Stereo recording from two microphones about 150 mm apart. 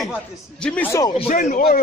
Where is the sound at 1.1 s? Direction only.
50° left (ahead or behind).